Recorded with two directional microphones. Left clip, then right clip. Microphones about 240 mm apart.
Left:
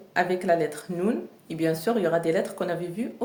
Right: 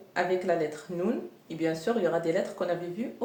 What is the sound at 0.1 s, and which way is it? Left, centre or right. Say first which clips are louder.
Speech: left 4 dB; left.